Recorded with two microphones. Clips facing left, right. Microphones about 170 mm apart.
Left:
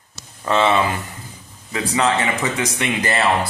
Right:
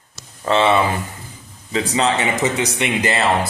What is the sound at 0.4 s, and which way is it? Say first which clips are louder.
A man's voice: right 2 dB; 15° right (ahead or behind).